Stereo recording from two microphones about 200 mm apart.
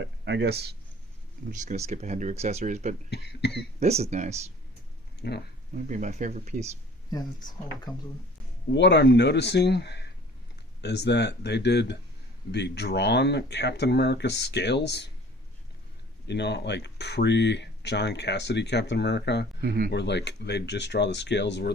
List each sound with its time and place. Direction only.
0.0 s speech: 60° right (ahead or behind)
1.5 s speech: 40° right (ahead or behind)
3.1 s speech: 55° left (ahead or behind)
3.8 s speech: 35° right (ahead or behind)
5.2 s speech: 55° left (ahead or behind)
5.7 s speech: 40° right (ahead or behind)
7.9 s speech: 20° left (ahead or behind)
8.7 s speech: 60° left (ahead or behind)
16.2 s speech: 60° left (ahead or behind)
19.6 s speech: 50° right (ahead or behind)
19.9 s speech: 60° left (ahead or behind)